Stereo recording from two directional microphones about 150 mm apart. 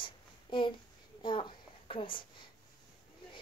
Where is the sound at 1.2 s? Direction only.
35° left (ahead or behind).